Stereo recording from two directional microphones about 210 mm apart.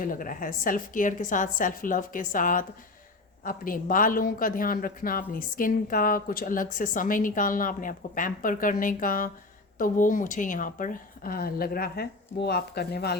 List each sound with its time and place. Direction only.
0.0 s speech: 40° left (ahead or behind)